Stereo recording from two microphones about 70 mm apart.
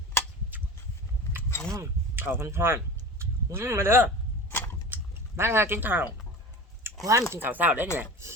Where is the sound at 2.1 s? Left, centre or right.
Right.